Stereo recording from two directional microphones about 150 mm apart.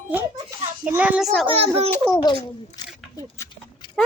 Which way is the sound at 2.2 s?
35° left (ahead or behind).